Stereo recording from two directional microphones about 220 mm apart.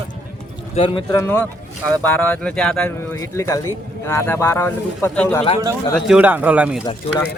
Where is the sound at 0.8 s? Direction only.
20° left (ahead or behind); by 6.8 s 5° right (ahead or behind).